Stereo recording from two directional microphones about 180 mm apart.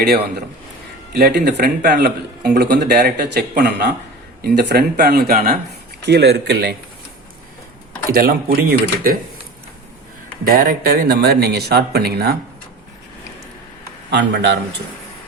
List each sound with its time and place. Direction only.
0.0 s speech: 65° right (ahead or behind)
8.1 s speech: 55° right (ahead or behind)
10.4 s speech: 55° right (ahead or behind)
14.1 s speech: 75° right (ahead or behind)